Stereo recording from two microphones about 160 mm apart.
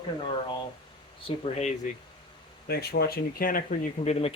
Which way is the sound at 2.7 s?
85° left.